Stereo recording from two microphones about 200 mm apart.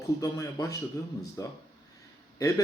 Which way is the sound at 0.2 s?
15° left (ahead or behind).